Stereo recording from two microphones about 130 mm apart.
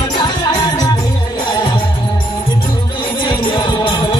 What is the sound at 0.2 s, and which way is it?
Music, 30° left (ahead or behind).